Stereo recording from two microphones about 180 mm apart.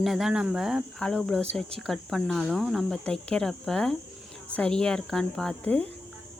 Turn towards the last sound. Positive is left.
turn(degrees=10)  # may be behind; listen again after turning